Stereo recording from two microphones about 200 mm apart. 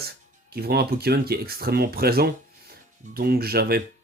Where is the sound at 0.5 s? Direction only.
50° right (ahead or behind).